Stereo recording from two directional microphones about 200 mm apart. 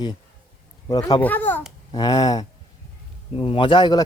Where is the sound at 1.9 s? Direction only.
20° left (ahead or behind).